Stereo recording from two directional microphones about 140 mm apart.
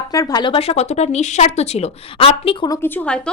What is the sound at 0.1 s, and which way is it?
Speech, 25° left (ahead or behind).